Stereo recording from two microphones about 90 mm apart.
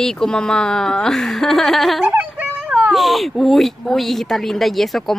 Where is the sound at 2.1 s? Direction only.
20° right (ahead or behind).